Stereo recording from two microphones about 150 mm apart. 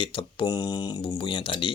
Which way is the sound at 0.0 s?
35° left (ahead or behind).